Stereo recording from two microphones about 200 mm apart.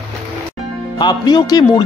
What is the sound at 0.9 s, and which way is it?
Speech, 20° left (ahead or behind).